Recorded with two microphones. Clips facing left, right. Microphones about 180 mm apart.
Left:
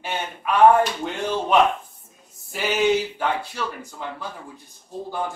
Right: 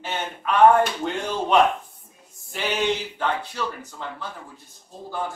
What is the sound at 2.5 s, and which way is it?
Speech, 5° left (ahead or behind).